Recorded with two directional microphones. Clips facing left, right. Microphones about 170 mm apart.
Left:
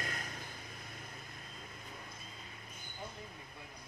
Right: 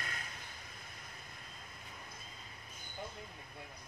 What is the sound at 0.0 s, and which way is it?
Vehicle, 40° left (ahead or behind).